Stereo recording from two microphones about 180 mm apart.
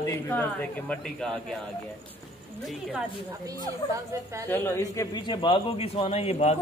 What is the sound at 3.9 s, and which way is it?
Speech, 15° right (ahead or behind).